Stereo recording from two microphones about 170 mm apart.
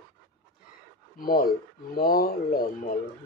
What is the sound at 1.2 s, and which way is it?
Speech, 60° left (ahead or behind).